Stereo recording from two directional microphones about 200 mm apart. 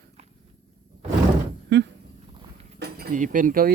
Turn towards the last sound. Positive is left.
turn(degrees=-45)  # may be behind; listen again after turning